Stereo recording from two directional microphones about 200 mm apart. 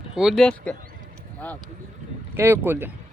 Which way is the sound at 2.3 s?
10° right (ahead or behind).